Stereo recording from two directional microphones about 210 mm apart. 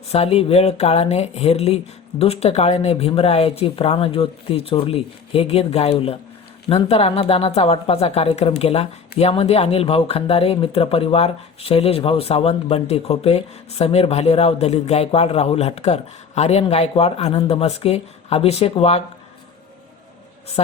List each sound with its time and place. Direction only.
0.1 s speech: 30° left (ahead or behind)